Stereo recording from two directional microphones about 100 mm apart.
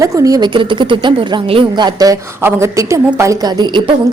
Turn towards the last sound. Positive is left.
turn(degrees=-50)  # may be behind; listen again after turning